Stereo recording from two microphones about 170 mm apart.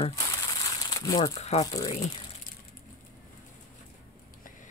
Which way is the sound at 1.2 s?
40° left (ahead or behind).